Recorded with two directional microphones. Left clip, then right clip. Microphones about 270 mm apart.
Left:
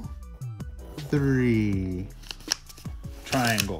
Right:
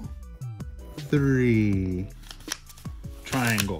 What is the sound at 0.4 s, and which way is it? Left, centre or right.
Music, centre.